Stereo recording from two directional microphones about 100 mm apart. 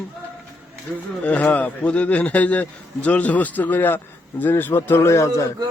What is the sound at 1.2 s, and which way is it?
A man's voice, 15° left (ahead or behind).